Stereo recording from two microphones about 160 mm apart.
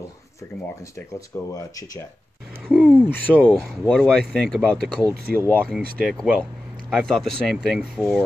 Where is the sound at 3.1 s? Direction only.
10° left (ahead or behind).